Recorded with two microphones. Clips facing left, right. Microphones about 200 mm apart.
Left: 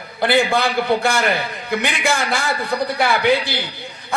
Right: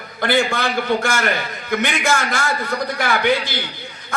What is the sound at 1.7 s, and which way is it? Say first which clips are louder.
A man's voice: right 1 dB; 35° left (ahead or behind).